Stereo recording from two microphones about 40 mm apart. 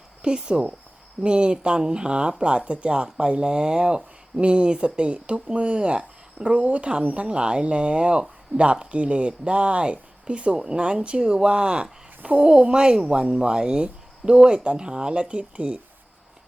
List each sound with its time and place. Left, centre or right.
0.2 s speech: right